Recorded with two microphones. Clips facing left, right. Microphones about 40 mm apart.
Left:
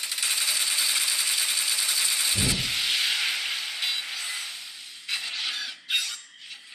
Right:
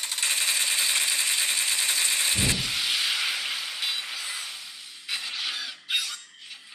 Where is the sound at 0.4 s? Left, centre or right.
Centre.